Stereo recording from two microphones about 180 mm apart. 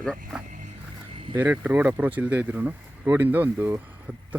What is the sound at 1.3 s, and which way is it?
Speech, 10° right (ahead or behind).